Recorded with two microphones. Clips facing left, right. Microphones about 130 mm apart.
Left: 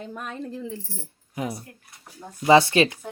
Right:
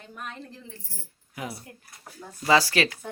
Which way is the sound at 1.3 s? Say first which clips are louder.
Left 6 dB; 25° left (ahead or behind).